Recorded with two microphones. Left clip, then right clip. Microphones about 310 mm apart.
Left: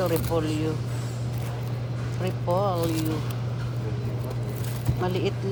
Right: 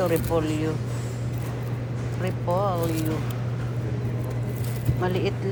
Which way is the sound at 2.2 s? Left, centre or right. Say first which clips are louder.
Even; centre.